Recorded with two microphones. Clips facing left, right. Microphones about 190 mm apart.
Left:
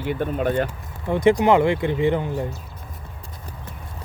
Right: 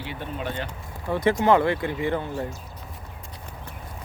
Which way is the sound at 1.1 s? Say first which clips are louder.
Left 4 dB; 15° left (ahead or behind).